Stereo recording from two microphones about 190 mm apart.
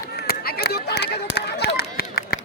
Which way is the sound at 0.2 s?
55° left (ahead or behind).